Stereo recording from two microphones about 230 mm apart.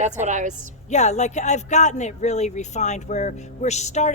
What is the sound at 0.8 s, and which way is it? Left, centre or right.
Speech, left.